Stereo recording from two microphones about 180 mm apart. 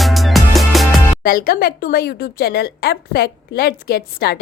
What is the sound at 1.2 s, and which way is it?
Speech, 55° left (ahead or behind).